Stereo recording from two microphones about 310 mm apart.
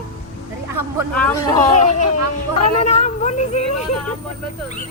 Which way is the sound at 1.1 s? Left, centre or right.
Centre.